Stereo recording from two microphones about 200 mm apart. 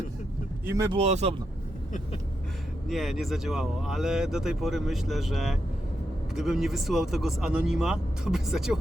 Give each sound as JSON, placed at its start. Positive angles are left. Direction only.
{"t": 0.6, "sound": "speech", "side_deg": -15}
{"t": 0.9, "sound": "speech", "side_deg": -30}
{"t": 2.9, "sound": "speech", "side_deg": 0}